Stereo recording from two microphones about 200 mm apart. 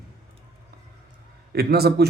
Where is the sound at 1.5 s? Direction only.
50° right (ahead or behind).